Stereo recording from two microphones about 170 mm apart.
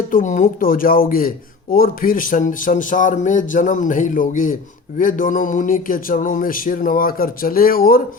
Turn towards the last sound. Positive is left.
turn(degrees=60)  # may be behind; listen again after turning